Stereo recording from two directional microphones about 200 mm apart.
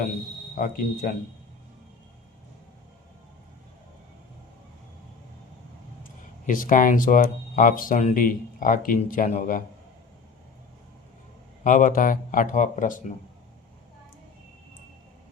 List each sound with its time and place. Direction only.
0.5 s speech: 45° left (ahead or behind)
6.4 s speech: 40° left (ahead or behind)
11.6 s speech: 40° left (ahead or behind)